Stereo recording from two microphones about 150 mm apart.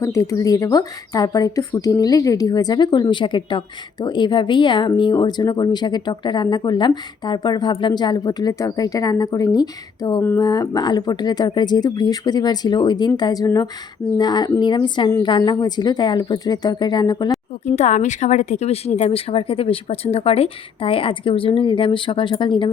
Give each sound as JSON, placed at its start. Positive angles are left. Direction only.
{"t": 0.0, "sound": "speech", "side_deg": 20}
{"t": 17.7, "sound": "speech", "side_deg": 50}